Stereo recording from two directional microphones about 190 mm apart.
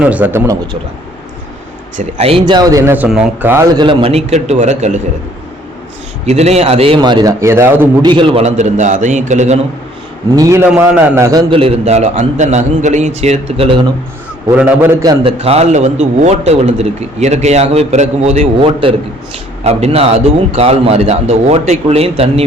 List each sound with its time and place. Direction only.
0.0 s a man's voice: 10° right (ahead or behind)
2.0 s a man's voice: 30° right (ahead or behind)
6.2 s a man's voice: 35° right (ahead or behind); by 8.1 s 15° right (ahead or behind)
8.1 s a man's voice: 30° right (ahead or behind)
10.3 s a man's voice: 15° right (ahead or behind)
11.6 s a man's voice: 35° right (ahead or behind)
14.5 s a man's voice: 10° right (ahead or behind)
15.0 s a man's voice: 25° right (ahead or behind)